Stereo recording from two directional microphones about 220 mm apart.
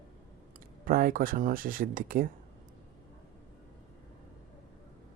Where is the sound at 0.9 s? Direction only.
40° right (ahead or behind).